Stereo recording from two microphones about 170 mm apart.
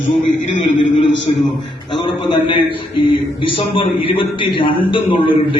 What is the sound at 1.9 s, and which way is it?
A man's voice, 30° left (ahead or behind).